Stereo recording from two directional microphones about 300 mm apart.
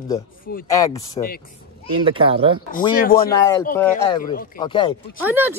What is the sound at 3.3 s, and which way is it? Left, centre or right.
Speech, centre.